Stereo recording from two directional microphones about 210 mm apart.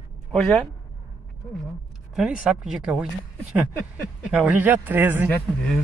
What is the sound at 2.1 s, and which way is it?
Speech, 5° right (ahead or behind).